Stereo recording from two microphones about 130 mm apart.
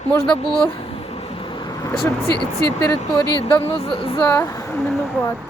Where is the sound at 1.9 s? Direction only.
20° left (ahead or behind).